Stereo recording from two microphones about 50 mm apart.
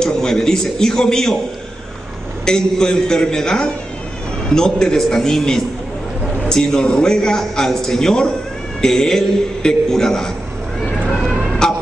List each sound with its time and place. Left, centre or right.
0.0 s a man's voice: centre
2.4 s a man's voice: centre
8.8 s a sound: centre
9.6 s a man's voice: centre
11.6 s music: centre